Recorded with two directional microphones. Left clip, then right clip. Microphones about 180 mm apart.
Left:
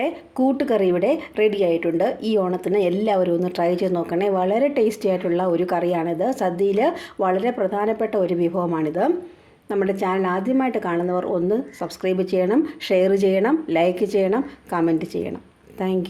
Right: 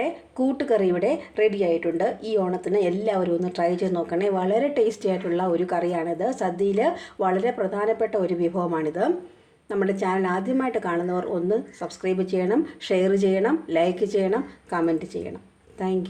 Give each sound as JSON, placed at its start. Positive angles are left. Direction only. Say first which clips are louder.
{"t": 0.0, "sound": "a woman's voice", "louder": "left 4 dB", "side_deg": 35}